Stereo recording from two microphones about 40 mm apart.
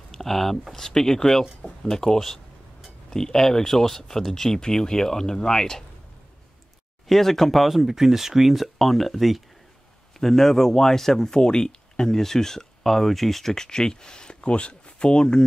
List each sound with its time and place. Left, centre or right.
0.1 s speech: centre
7.1 s speech: centre
7.6 s speech: centre; by 15.4 s left